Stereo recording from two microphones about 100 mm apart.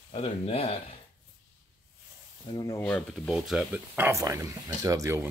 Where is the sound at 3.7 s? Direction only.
20° right (ahead or behind).